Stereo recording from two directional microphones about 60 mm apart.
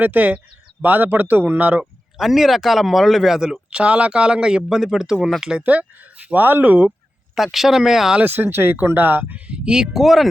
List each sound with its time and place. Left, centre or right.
0.0 s speech: right
1.8 s speech: centre
3.7 s speech: centre
5.6 s speech: right
7.3 s speech: centre
8.2 s speech: right
9.5 s speech: centre